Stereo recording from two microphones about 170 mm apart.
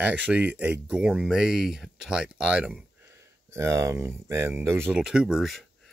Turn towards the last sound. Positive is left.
turn(degrees=0)  # may be behind; listen again after turning